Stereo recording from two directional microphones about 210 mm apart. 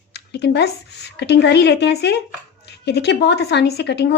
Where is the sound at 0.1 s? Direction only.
50° left (ahead or behind).